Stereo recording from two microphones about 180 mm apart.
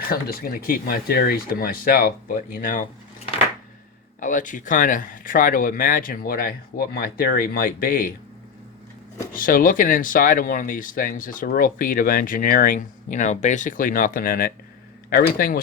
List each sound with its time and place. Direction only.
0.0 s speech: 55° left (ahead or behind)
4.2 s speech: 45° left (ahead or behind)
9.3 s speech: 50° left (ahead or behind)